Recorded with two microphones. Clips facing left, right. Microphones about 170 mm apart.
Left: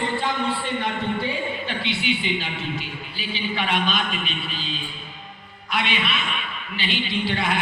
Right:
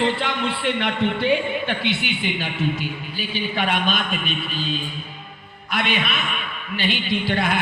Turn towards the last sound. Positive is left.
turn(degrees=-50)  # may be behind; listen again after turning